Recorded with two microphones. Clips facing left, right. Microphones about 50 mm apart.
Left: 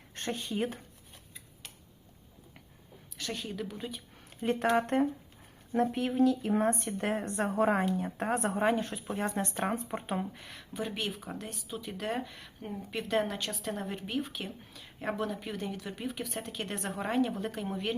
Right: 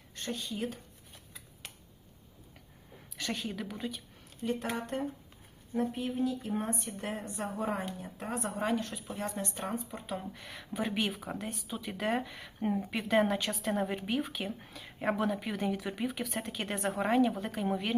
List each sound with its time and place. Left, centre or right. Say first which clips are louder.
0.1 s speech: left 3 dB; left
3.2 s speech: right 1 dB; centre
4.7 s a woman's voice: left 8 dB; left
5.7 s a woman's voice: left 4 dB; left
8.5 s speech: left 4 dB; left
9.1 s speech: left 5 dB; left
10.3 s speech: right 2 dB; centre
14.7 s a sound: right 3 dB; centre
15.0 s speech: right 3 dB; centre